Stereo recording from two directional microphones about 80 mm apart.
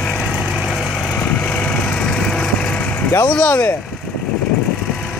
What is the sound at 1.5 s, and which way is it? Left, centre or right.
Vehicle, centre.